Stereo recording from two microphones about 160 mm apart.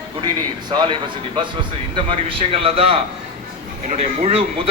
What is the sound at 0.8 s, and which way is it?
A man's voice, 30° right (ahead or behind).